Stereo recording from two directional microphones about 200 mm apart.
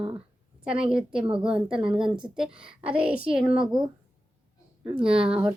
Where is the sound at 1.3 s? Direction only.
25° right (ahead or behind).